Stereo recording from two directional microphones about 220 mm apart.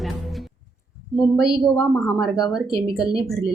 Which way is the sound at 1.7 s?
15° left (ahead or behind).